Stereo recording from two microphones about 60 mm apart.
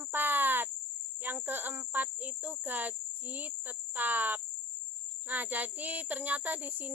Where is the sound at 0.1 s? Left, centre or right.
Right.